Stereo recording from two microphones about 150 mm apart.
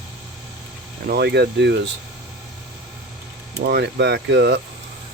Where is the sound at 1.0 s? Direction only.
90° right.